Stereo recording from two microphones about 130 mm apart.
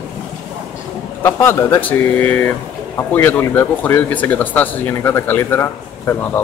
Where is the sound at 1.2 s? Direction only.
20° left (ahead or behind).